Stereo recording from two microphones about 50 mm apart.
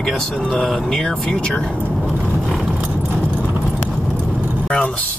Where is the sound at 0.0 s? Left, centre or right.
Centre.